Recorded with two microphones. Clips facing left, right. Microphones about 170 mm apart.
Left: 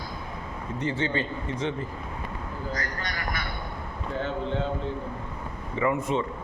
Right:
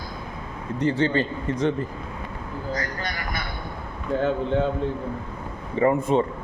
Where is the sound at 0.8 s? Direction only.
35° right (ahead or behind).